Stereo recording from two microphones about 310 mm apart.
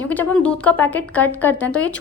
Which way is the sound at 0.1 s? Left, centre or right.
Centre.